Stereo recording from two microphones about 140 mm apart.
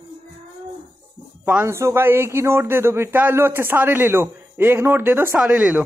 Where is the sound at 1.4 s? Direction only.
15° right (ahead or behind).